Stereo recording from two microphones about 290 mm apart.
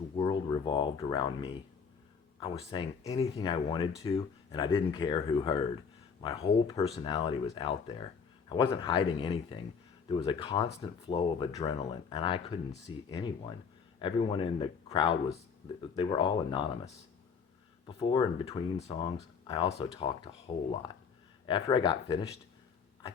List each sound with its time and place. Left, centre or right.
0.2 s speech: centre
21.4 s speech: centre